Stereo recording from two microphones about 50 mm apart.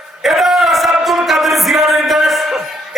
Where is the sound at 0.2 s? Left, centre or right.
Centre.